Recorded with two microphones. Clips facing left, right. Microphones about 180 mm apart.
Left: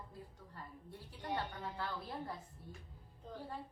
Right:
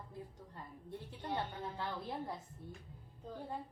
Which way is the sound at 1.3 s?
20° right (ahead or behind).